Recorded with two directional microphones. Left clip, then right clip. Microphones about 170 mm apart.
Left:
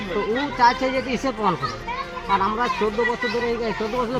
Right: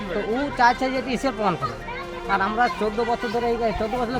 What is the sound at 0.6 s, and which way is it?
Speech, 40° right (ahead or behind).